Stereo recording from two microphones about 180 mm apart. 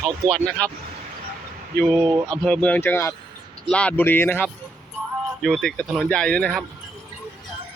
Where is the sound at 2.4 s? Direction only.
5° left (ahead or behind).